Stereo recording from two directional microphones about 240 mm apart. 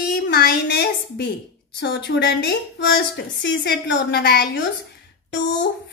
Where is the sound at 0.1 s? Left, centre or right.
Left.